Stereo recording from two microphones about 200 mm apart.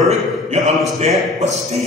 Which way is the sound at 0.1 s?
35° right (ahead or behind).